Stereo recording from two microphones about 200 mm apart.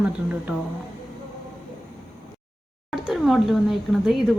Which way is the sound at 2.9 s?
Centre (ahead or behind).